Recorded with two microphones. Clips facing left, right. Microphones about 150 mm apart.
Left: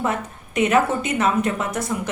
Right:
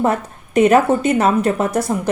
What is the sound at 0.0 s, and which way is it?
A woman's voice, 40° right (ahead or behind).